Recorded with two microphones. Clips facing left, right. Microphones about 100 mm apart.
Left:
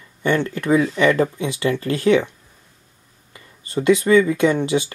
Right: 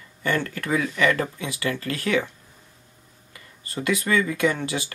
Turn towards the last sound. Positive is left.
turn(degrees=20)  # may be behind; listen again after turning